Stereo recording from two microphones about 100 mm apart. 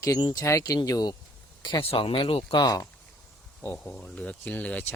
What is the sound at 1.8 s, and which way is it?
Speech, 65° left (ahead or behind).